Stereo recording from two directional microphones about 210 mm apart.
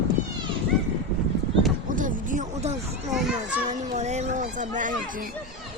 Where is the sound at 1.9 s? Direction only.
40° right (ahead or behind).